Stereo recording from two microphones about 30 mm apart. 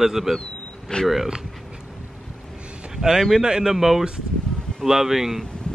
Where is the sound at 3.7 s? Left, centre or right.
Centre.